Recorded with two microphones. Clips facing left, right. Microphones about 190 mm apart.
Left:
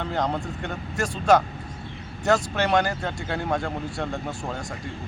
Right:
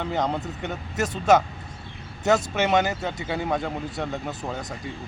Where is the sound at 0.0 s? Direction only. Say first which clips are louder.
Even; 5° right (ahead or behind).